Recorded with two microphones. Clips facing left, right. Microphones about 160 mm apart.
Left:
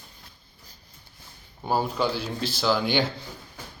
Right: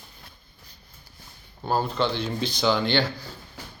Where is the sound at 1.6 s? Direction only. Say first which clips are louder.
Even; 10° left (ahead or behind).